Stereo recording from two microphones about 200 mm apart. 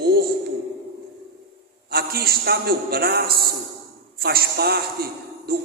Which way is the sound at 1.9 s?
50° right (ahead or behind).